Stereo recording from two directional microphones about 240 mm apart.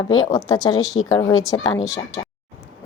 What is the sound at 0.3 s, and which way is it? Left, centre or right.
Speech, centre.